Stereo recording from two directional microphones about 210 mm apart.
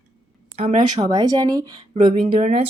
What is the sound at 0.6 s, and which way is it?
Speech, 30° right (ahead or behind).